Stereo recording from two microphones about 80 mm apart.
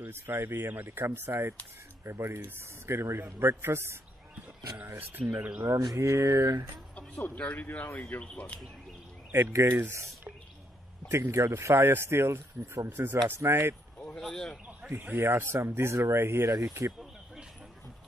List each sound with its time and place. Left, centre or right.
0.0 s speech: right
5.2 s speech: centre
5.7 s mantra: right
5.9 s speech: right
7.3 s speech: centre
9.3 s speech: right
14.3 s speech: centre
14.9 s speech: right